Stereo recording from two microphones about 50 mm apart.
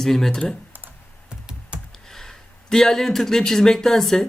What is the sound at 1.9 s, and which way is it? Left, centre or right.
Speech, centre.